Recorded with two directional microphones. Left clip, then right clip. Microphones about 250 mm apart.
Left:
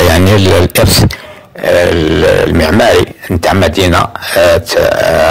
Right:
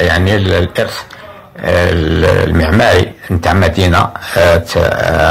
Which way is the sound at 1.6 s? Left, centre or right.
Left.